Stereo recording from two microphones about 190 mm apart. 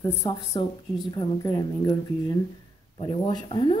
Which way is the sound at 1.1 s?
20° left (ahead or behind).